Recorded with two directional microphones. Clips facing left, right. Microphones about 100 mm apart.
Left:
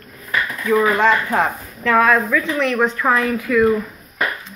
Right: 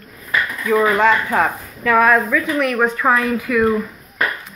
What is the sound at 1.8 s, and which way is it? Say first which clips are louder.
Speech: right 1 dB; 10° right (ahead or behind).